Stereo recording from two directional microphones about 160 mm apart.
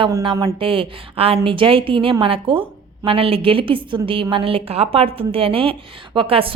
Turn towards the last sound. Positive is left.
turn(degrees=-35)  # may be behind; listen again after turning